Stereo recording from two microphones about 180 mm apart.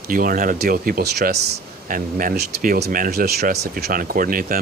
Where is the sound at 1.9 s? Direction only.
50° right (ahead or behind).